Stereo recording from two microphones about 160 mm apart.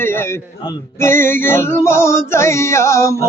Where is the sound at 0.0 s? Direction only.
15° left (ahead or behind).